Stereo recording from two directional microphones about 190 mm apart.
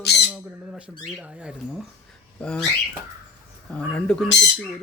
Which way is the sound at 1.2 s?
5° right (ahead or behind).